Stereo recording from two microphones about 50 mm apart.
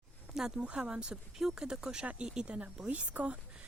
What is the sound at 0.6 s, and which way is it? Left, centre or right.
A woman's voice, right.